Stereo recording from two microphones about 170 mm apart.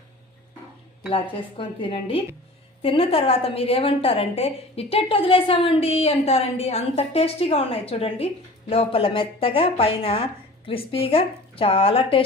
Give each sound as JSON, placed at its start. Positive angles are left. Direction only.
{"t": 1.1, "sound": "a woman's voice", "side_deg": 30}